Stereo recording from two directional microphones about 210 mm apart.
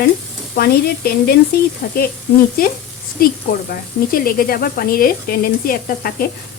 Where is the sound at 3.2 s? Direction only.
45° left (ahead or behind).